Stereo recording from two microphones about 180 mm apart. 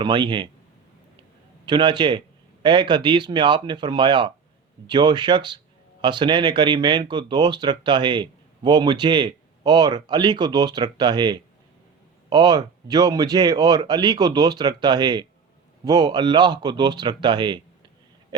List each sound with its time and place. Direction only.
0.0 s speech: 25° right (ahead or behind)
1.6 s speech: 25° right (ahead or behind)